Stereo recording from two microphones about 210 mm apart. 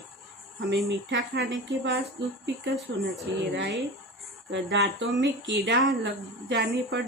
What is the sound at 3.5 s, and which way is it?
Speech, 55° right (ahead or behind).